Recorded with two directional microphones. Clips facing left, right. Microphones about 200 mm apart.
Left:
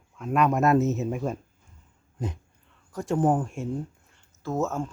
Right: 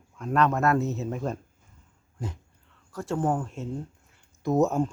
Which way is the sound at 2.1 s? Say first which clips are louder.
Left 3 dB; 20° left (ahead or behind).